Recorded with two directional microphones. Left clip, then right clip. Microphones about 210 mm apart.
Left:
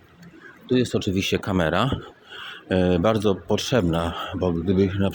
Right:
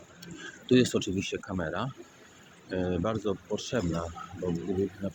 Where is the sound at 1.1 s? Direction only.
45° left (ahead or behind).